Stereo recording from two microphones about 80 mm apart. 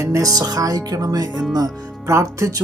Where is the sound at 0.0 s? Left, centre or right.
Right.